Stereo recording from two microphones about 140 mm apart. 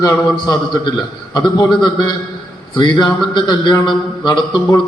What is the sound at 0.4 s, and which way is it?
A man's voice, 30° left (ahead or behind).